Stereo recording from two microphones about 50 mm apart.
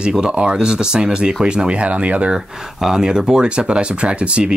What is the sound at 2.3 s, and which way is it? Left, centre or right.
Speech, centre.